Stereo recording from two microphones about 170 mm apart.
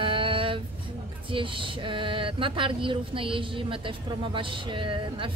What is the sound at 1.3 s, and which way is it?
Speech, 30° right (ahead or behind).